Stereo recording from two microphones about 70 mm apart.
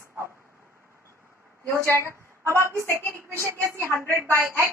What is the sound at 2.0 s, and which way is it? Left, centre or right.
A woman's voice, right.